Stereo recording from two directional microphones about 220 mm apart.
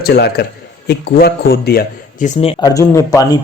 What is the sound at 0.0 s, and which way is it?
A man's voice, 45° left (ahead or behind).